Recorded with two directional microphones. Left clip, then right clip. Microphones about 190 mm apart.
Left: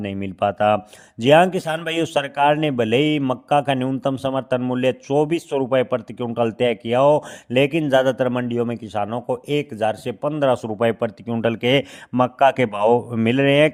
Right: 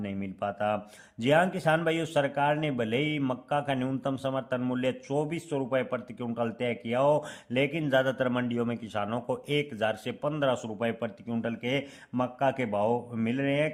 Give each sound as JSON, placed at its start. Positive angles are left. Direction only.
{"t": 0.0, "sound": "a man's voice", "side_deg": 40}